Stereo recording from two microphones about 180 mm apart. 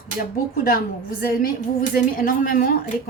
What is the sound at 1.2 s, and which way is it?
Speech, 55° left (ahead or behind).